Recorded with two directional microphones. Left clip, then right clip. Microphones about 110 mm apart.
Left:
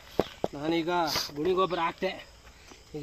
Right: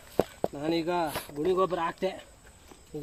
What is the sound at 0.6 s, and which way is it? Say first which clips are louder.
Speech: left 1 dB; 35° right (ahead or behind).